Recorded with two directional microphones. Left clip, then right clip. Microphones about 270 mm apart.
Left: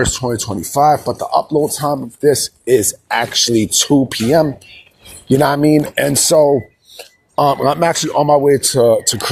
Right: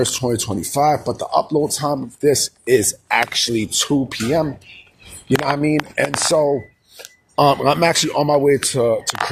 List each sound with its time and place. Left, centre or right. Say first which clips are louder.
0.0 s speech: left 2 dB; centre
3.5 s speech: left 6 dB; left
6.9 s speech: left 2 dB; centre
8.6 s speech: left 6 dB; left